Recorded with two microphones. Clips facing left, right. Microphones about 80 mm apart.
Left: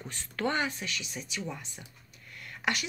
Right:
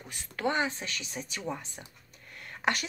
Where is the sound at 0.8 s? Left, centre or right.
Right.